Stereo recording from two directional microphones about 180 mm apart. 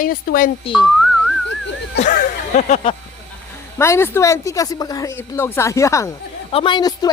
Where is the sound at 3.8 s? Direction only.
15° left (ahead or behind).